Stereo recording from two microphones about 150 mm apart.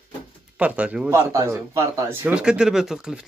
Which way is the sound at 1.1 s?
20° right (ahead or behind).